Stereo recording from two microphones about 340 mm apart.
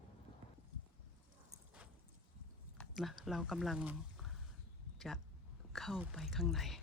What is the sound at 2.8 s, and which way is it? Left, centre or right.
Speech, centre.